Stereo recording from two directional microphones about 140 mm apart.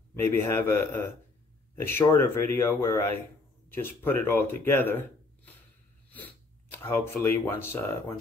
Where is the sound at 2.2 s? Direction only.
15° left (ahead or behind).